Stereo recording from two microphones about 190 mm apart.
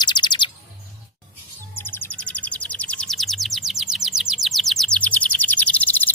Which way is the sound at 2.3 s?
5° left (ahead or behind).